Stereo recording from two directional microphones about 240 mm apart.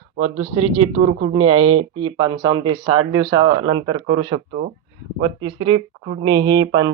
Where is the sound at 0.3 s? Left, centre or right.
Right.